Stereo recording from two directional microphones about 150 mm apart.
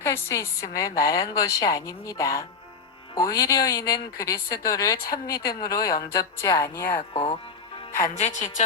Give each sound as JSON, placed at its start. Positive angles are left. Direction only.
{"t": 0.0, "sound": "a woman's voice", "side_deg": 20}
{"t": 7.1, "sound": "speech", "side_deg": 35}
{"t": 8.0, "sound": "a woman's voice", "side_deg": 55}